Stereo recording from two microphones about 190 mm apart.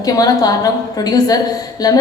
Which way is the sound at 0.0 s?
20° left (ahead or behind).